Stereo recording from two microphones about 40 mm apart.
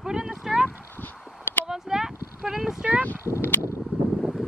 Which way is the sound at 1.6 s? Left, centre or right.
Centre.